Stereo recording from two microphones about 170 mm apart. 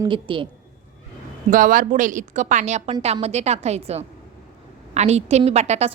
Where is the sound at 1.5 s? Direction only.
55° right (ahead or behind).